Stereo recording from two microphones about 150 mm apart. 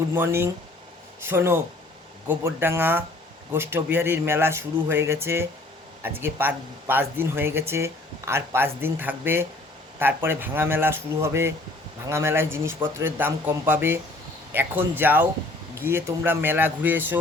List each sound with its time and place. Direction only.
0.1 s speech: 15° right (ahead or behind)